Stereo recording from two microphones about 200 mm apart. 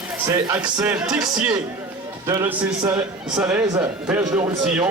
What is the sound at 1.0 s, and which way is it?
Speech, centre (ahead or behind).